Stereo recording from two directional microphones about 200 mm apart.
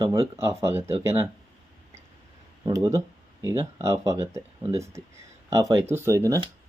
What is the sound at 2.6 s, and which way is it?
Speech, 15° right (ahead or behind).